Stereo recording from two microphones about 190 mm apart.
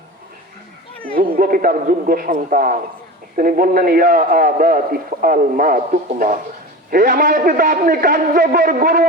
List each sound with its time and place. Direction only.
1.1 s a man's voice: 50° right (ahead or behind)